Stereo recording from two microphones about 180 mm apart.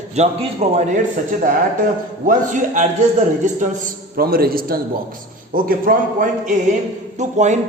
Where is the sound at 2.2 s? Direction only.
45° right (ahead or behind).